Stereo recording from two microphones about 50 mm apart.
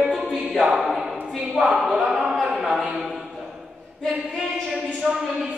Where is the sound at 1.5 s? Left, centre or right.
Centre.